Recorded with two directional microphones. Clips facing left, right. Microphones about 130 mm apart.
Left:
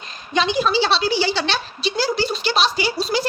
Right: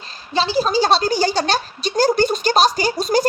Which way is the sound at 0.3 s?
35° right (ahead or behind).